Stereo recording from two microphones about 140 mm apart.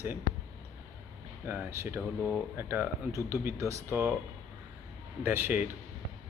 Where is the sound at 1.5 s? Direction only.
15° right (ahead or behind).